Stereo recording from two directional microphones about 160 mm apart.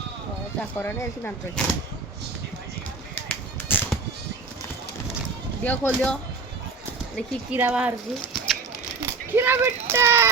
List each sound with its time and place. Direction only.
0.6 s speech: 10° left (ahead or behind)
3.2 s a sound: 10° left (ahead or behind)
5.6 s speech: 10° left (ahead or behind)
7.5 s speech: 10° right (ahead or behind)
9.3 s speech: 15° right (ahead or behind)